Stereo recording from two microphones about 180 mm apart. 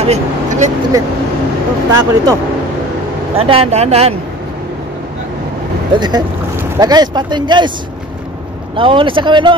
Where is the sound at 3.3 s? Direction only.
35° right (ahead or behind).